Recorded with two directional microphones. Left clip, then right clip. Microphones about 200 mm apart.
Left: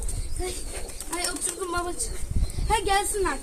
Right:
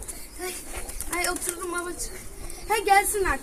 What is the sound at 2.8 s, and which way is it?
Speech, 30° left (ahead or behind).